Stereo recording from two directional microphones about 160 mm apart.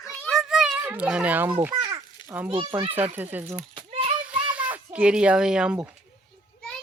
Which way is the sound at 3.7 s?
35° right (ahead or behind).